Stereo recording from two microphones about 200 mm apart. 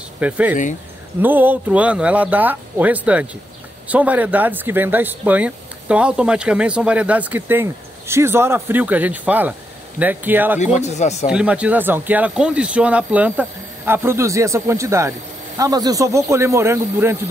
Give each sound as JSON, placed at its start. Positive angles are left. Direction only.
{"t": 0.2, "sound": "speech", "side_deg": -5}
{"t": 10.6, "sound": "speech", "side_deg": 35}
{"t": 11.2, "sound": "speech", "side_deg": -5}